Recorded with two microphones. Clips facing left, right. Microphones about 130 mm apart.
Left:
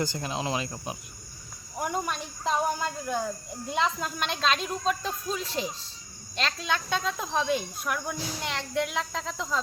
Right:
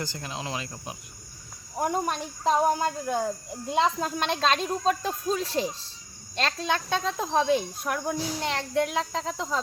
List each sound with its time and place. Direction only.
0.0 s speech: 20° left (ahead or behind)
1.7 s speech: 35° right (ahead or behind)